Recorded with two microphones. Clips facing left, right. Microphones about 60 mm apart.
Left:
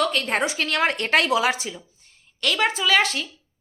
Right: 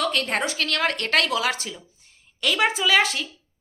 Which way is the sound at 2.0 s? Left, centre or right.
Centre.